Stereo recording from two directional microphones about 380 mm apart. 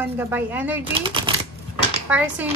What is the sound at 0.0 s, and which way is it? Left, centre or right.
A woman's voice, centre.